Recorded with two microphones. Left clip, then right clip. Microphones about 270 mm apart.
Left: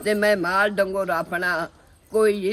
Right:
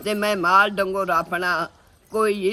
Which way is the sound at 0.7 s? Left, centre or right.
Centre.